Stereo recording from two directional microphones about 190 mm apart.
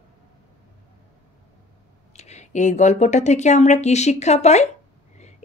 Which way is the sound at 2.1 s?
35° left (ahead or behind).